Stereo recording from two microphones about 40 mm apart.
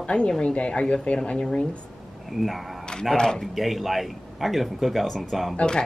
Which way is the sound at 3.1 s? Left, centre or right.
Centre.